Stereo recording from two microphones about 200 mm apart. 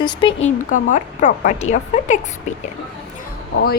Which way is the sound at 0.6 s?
40° left (ahead or behind).